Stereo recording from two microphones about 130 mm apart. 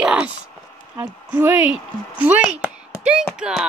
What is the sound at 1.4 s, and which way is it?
A child's voice, 15° right (ahead or behind).